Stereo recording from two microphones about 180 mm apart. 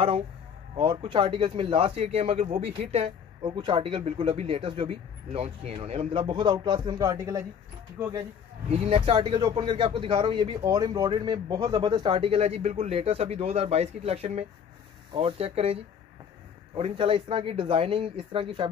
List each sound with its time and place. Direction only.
0.7 s a man's voice: 30° right (ahead or behind)
8.6 s a man's voice: 35° right (ahead or behind)